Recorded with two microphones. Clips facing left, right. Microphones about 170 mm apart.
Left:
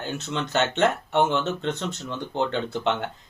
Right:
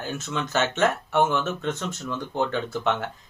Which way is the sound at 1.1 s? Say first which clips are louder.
Even; 20° left (ahead or behind).